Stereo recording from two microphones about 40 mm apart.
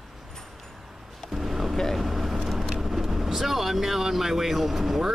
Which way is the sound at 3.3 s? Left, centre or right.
Centre.